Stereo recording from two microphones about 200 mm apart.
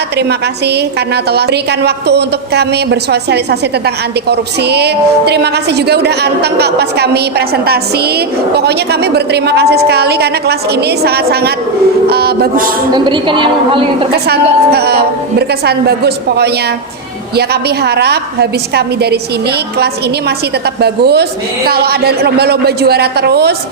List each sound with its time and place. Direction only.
0.2 s a woman's voice: 55° right (ahead or behind)
12.9 s a woman's voice: 25° right (ahead or behind)
14.1 s a woman's voice: 50° right (ahead or behind)